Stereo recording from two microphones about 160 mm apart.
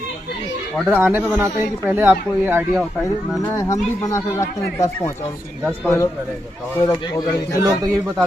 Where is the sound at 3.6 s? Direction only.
20° left (ahead or behind).